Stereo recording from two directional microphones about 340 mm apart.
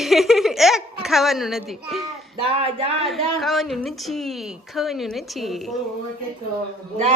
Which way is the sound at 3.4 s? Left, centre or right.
Centre.